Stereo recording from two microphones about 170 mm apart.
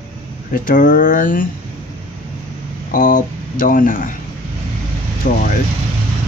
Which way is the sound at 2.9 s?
50° left (ahead or behind).